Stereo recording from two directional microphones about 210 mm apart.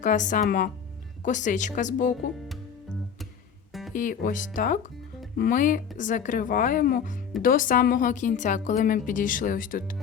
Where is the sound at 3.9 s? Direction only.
40° left (ahead or behind).